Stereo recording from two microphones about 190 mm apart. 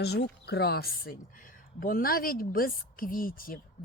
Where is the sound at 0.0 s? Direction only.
60° left (ahead or behind).